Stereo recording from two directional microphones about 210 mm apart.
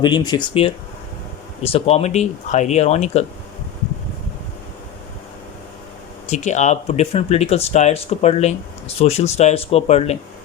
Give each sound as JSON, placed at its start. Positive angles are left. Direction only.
{"t": 0.0, "sound": "speech", "side_deg": 20}
{"t": 6.2, "sound": "speech", "side_deg": 35}